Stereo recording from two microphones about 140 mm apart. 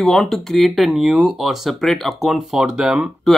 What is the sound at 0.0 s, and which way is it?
Speech, centre (ahead or behind).